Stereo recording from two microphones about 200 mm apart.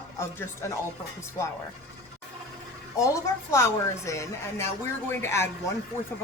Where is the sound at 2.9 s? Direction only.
15° left (ahead or behind).